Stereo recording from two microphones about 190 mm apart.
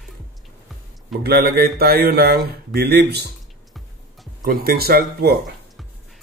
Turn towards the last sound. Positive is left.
turn(degrees=-55)  # may be behind; listen again after turning